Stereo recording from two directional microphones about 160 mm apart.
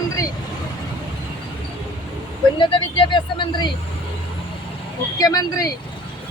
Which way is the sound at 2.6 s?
35° left (ahead or behind).